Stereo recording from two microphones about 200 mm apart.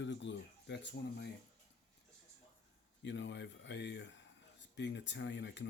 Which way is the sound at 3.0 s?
60° left (ahead or behind).